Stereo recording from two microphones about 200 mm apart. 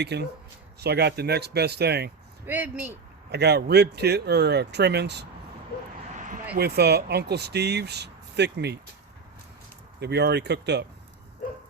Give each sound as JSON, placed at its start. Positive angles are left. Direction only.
{"t": 0.0, "sound": "speech", "side_deg": -55}
{"t": 2.5, "sound": "speech", "side_deg": -10}
{"t": 3.3, "sound": "speech", "side_deg": -55}
{"t": 6.1, "sound": "vehicle", "side_deg": -40}
{"t": 6.5, "sound": "speech", "side_deg": -55}
{"t": 10.0, "sound": "speech", "side_deg": -55}